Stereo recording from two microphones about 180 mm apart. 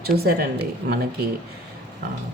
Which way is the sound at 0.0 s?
60° right (ahead or behind).